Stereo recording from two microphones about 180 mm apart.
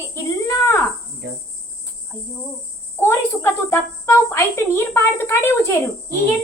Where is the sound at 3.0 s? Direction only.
15° left (ahead or behind).